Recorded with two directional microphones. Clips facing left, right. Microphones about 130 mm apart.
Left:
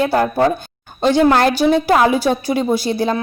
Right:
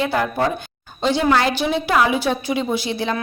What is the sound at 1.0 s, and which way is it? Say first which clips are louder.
A woman's voice: left 5 dB; 50° left (ahead or behind).